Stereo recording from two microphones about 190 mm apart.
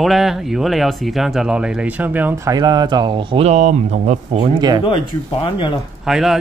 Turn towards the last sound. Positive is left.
turn(degrees=0)  # may be behind; listen again after turning